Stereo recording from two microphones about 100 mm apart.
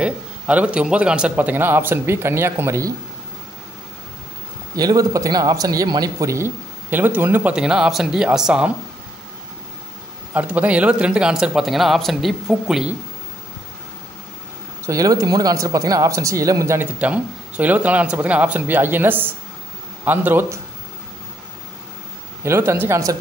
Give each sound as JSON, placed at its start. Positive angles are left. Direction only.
{"t": 0.0, "sound": "a man's voice", "side_deg": -10}
{"t": 4.7, "sound": "speech", "side_deg": -40}
{"t": 7.5, "sound": "speech", "side_deg": -10}
{"t": 10.3, "sound": "speech", "side_deg": -15}
{"t": 14.9, "sound": "speech", "side_deg": -35}
{"t": 16.8, "sound": "a man's voice", "side_deg": -15}
{"t": 22.4, "sound": "a man's voice", "side_deg": -25}